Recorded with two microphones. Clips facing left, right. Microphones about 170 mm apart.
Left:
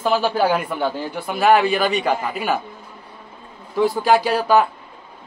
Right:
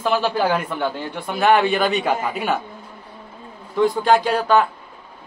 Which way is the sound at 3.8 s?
5° left (ahead or behind).